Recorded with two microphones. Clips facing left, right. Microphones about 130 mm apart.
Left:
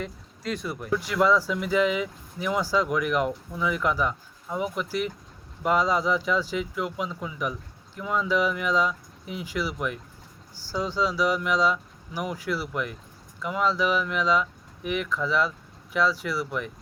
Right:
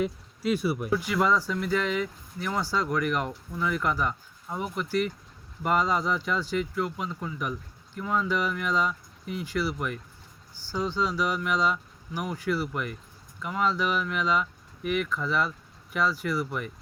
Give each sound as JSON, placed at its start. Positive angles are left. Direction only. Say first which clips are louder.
{"t": 0.0, "sound": "speech", "louder": "right 6 dB", "side_deg": -5}